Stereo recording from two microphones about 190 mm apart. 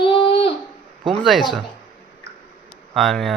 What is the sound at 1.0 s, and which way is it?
Speech, centre (ahead or behind).